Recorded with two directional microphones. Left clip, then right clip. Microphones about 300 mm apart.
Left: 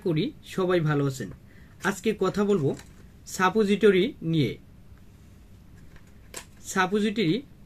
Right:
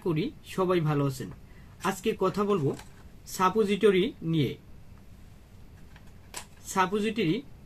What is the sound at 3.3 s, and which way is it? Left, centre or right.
Speech, right.